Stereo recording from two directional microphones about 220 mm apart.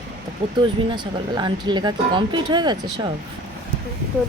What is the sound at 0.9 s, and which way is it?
Speech, 20° right (ahead or behind).